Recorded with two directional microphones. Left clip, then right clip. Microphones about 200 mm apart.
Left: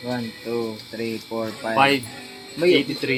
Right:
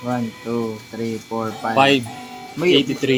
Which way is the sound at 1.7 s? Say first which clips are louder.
Right 3 dB; 45° right (ahead or behind).